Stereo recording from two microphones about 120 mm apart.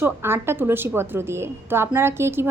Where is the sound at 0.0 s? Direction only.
20° right (ahead or behind).